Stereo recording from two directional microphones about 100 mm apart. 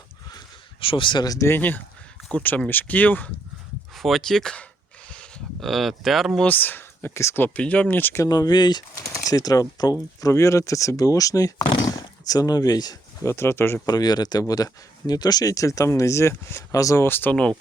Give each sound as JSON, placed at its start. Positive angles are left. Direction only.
{"t": 0.8, "sound": "speech", "side_deg": 60}
{"t": 1.5, "sound": "speech", "side_deg": 20}
{"t": 3.9, "sound": "speech", "side_deg": 0}
{"t": 6.4, "sound": "speech", "side_deg": 20}
{"t": 8.2, "sound": "speech", "side_deg": 40}
{"t": 9.0, "sound": "speech", "side_deg": 35}
{"t": 13.3, "sound": "speech", "side_deg": 25}
{"t": 13.8, "sound": "speech", "side_deg": 40}